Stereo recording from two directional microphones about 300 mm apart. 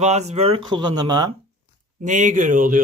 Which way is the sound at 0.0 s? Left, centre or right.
Right.